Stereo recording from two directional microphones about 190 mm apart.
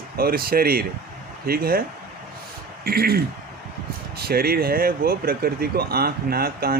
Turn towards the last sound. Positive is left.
turn(degrees=-55)  # may be behind; listen again after turning